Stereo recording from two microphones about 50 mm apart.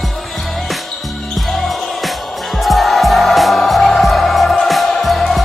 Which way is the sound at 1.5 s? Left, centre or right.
Centre.